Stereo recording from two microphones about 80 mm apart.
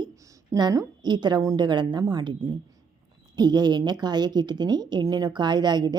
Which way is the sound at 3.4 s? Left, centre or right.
Right.